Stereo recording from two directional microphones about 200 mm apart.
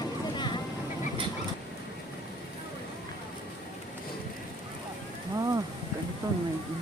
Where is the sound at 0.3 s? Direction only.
20° left (ahead or behind).